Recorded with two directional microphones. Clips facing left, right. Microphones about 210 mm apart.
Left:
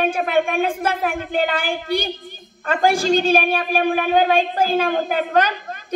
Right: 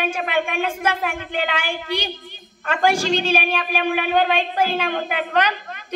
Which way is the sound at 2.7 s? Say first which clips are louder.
Left 2 dB; 50° left (ahead or behind).